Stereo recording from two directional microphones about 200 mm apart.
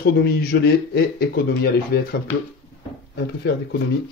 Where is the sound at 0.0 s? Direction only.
50° left (ahead or behind).